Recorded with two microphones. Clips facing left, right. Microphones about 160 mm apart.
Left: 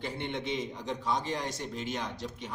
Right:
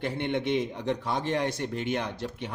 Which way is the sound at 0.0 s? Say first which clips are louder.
Right 6 dB; 60° right (ahead or behind).